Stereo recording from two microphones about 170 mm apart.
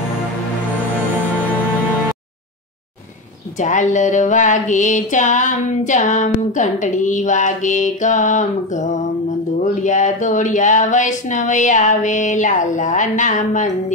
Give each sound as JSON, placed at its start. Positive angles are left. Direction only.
{"t": 3.5, "sound": "music", "side_deg": 45}